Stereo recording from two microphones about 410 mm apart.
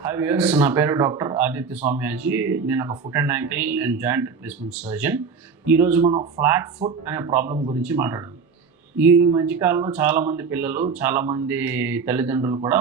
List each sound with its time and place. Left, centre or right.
0.0 s a man's voice: centre
9.6 s a man's voice: centre